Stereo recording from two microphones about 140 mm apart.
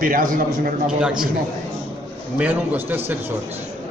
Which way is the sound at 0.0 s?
85° right.